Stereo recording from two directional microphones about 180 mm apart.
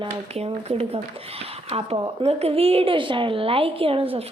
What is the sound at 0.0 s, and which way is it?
Speech, 35° right (ahead or behind).